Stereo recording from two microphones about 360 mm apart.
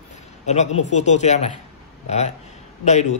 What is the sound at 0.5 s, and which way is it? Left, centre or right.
A man's voice, centre.